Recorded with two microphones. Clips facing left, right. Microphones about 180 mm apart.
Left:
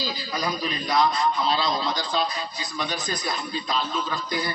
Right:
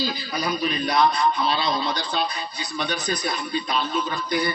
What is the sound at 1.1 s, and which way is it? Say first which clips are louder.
A man's voice: right 1 dB; 65° right (ahead or behind).